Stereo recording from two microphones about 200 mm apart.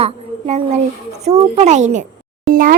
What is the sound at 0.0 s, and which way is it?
A child's voice, 30° right (ahead or behind).